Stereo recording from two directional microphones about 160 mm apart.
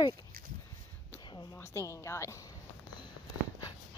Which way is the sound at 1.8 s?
20° left (ahead or behind).